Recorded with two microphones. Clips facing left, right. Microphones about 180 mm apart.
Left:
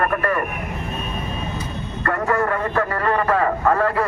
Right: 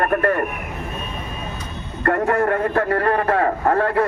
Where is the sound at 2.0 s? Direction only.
45° right (ahead or behind).